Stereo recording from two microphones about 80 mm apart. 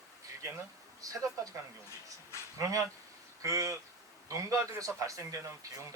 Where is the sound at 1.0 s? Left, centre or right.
Right.